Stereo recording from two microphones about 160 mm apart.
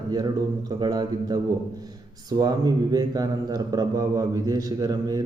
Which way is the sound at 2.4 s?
25° right (ahead or behind).